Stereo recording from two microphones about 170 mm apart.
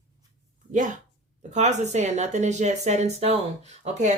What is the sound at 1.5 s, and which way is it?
Speech, 45° right (ahead or behind).